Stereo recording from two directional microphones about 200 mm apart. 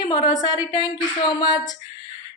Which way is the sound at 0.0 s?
20° left (ahead or behind).